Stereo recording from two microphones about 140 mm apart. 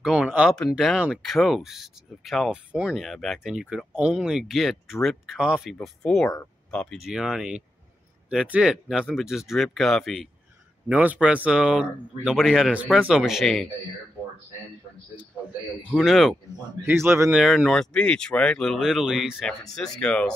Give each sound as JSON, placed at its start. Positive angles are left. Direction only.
{"t": 0.0, "sound": "speech", "side_deg": -5}
{"t": 10.9, "sound": "speech", "side_deg": -10}
{"t": 15.9, "sound": "speech", "side_deg": -5}
{"t": 16.8, "sound": "speech", "side_deg": -15}
{"t": 17.4, "sound": "speech", "side_deg": -5}